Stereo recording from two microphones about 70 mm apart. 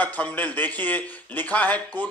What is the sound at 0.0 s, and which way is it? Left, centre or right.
A man's voice, left.